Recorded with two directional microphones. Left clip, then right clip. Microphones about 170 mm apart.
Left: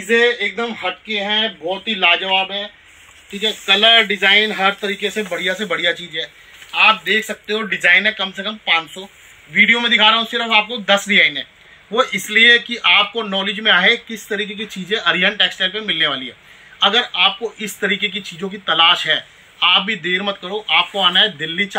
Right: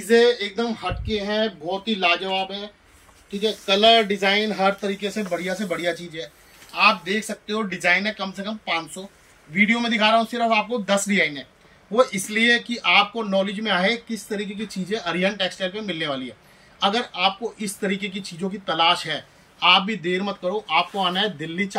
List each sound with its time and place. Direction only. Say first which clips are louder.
0.2 s speech: left 3 dB; 35° left (ahead or behind)
3.3 s speech: left 6 dB; 10° right (ahead or behind)